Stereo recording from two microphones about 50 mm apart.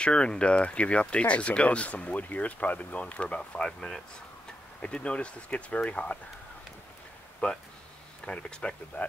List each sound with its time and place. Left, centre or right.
0.0 s speech: centre
7.4 s speech: left